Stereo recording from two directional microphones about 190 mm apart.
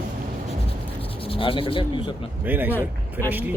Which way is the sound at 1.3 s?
30° left (ahead or behind).